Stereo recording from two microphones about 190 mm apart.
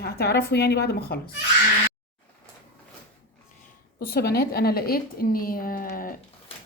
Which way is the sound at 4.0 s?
55° left (ahead or behind).